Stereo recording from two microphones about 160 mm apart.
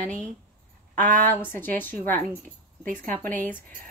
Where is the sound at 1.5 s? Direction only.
10° left (ahead or behind).